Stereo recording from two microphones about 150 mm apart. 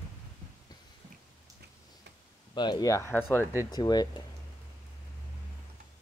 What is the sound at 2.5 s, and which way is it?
Speech, 30° left (ahead or behind).